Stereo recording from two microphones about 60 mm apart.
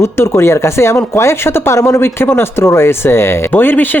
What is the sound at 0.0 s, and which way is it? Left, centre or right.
Speech, left.